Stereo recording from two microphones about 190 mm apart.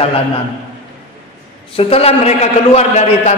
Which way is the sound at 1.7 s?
30° left (ahead or behind).